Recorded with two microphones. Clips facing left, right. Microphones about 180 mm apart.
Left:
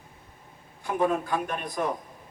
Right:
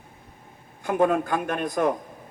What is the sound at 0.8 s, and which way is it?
A man's voice, 50° right (ahead or behind).